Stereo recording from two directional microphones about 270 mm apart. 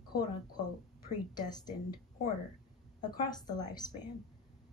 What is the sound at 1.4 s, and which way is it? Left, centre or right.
Speech, centre.